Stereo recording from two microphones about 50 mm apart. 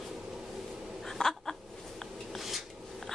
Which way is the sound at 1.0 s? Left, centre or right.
Centre.